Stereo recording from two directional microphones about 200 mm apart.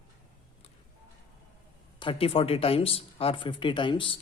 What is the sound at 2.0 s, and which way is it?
Speech, 25° left (ahead or behind).